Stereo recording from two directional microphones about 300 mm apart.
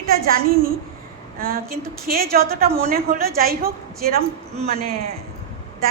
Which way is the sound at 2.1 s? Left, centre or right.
Right.